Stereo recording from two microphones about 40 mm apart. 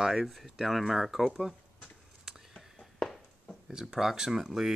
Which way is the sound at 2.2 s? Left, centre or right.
Centre.